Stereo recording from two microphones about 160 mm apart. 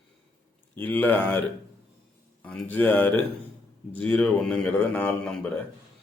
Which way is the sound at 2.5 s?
10° left (ahead or behind).